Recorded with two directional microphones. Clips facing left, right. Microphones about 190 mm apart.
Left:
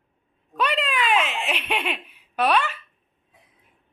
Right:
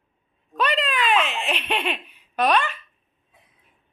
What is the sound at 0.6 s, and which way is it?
Giggle, 10° left (ahead or behind).